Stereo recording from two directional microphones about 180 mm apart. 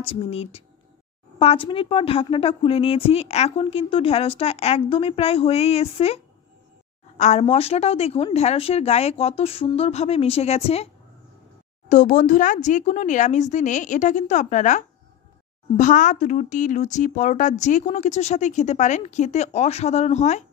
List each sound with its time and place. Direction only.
0.0 s a woman's voice: 30° left (ahead or behind)
11.9 s a woman's voice: 45° left (ahead or behind)